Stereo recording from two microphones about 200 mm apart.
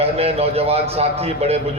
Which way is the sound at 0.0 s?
30° right (ahead or behind).